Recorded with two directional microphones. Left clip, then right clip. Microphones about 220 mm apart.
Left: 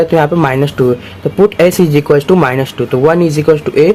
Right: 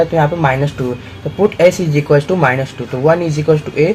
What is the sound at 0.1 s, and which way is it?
Speech, 45° left (ahead or behind).